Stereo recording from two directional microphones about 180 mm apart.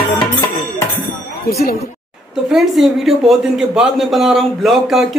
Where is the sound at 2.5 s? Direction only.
Centre (ahead or behind).